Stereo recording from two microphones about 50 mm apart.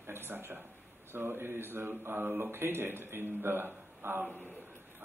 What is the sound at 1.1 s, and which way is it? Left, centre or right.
Speech, right.